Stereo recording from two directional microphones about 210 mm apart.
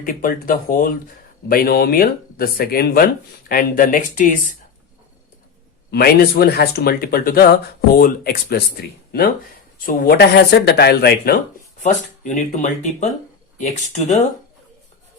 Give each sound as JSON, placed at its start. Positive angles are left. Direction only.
{"t": 0.0, "sound": "speech", "side_deg": 40}
{"t": 5.9, "sound": "speech", "side_deg": 45}
{"t": 9.8, "sound": "speech", "side_deg": 45}
{"t": 12.2, "sound": "speech", "side_deg": 35}